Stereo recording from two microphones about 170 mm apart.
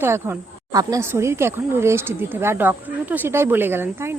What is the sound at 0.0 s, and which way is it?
Speech, 15° right (ahead or behind).